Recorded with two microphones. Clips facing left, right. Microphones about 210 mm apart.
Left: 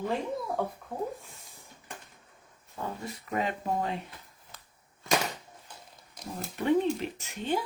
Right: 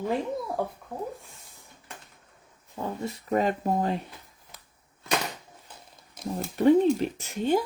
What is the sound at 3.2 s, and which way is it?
Speech, 40° right (ahead or behind).